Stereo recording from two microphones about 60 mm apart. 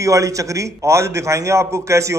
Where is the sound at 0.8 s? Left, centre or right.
Right.